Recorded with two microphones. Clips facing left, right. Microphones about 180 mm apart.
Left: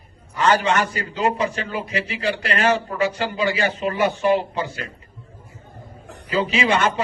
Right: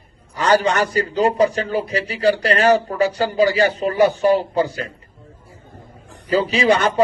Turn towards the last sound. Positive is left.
turn(degrees=-35)  # may be behind; listen again after turning